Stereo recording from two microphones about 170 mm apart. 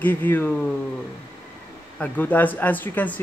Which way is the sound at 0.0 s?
10° left (ahead or behind).